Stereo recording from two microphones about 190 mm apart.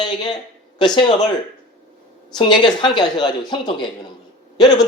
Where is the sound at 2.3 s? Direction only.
25° left (ahead or behind).